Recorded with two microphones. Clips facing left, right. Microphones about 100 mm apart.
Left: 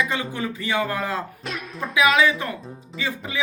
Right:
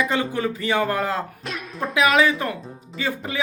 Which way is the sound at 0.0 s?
45° right (ahead or behind).